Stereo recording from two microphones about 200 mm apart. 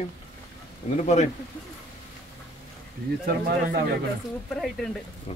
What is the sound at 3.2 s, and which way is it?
Speech, 50° right (ahead or behind).